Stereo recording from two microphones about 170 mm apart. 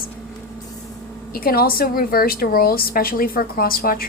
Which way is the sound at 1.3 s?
60° left (ahead or behind).